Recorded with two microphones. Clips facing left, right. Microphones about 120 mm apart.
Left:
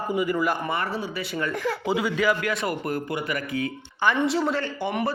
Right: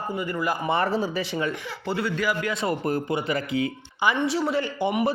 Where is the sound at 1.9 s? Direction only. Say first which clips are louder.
Even; 10° left (ahead or behind).